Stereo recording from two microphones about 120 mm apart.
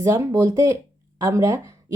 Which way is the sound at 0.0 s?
25° right (ahead or behind).